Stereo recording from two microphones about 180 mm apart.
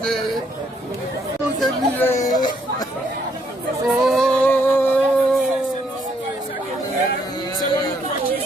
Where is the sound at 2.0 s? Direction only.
20° left (ahead or behind).